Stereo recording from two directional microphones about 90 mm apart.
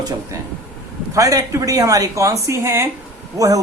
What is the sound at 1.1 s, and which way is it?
A woman's voice, 40° right (ahead or behind).